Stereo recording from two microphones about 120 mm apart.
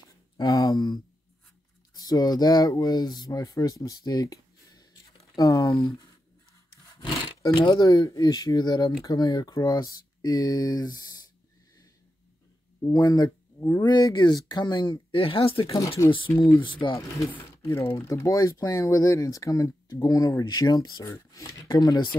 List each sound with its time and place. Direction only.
0.4 s speech: 30° left (ahead or behind)
5.7 s speech: 40° left (ahead or behind)
6.9 s rub: 40° left (ahead or behind)
7.5 s speech: 40° left (ahead or behind)
12.9 s speech: 35° left (ahead or behind)
13.8 s speech: 35° left (ahead or behind)
15.6 s speech: 30° left (ahead or behind)
16.5 s speech: 40° left (ahead or behind)
17.3 s speech: 20° left (ahead or behind)